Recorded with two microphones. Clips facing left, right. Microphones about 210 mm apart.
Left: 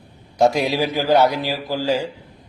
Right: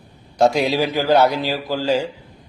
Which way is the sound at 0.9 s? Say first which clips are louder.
Even; 10° left (ahead or behind).